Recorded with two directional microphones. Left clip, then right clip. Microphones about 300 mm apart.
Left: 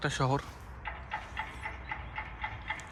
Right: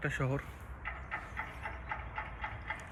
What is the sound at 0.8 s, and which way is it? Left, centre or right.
Vehicle, left.